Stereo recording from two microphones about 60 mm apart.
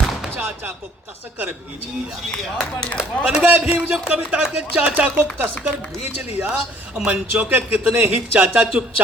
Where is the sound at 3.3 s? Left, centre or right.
Centre.